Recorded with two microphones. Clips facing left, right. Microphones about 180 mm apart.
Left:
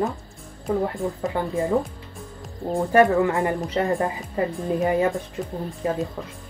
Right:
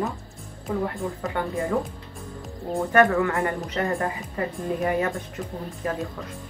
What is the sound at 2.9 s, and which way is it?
A woman's voice, 25° left (ahead or behind).